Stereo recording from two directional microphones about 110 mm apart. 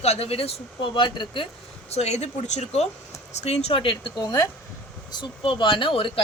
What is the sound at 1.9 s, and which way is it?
Speech, 75° left (ahead or behind).